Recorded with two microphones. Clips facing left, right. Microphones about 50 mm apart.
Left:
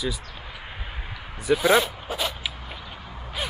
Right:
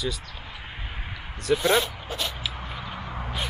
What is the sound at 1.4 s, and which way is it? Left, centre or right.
Speech, centre.